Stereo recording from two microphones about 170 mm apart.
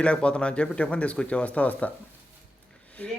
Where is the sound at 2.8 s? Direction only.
10° left (ahead or behind).